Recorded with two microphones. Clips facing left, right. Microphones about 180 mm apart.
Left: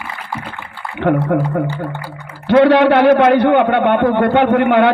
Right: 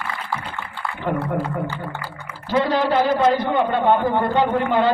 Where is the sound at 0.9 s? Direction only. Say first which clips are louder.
Left 9 dB; 65° left (ahead or behind).